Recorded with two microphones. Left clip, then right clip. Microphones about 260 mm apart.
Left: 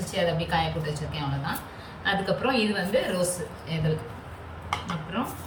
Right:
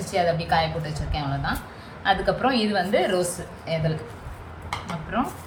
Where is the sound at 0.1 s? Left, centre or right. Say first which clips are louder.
Right 4 dB; centre.